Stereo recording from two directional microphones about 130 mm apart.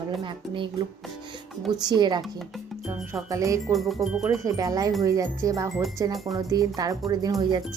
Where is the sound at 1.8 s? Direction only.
30° right (ahead or behind).